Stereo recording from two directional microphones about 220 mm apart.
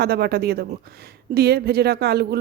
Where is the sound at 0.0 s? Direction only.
45° right (ahead or behind).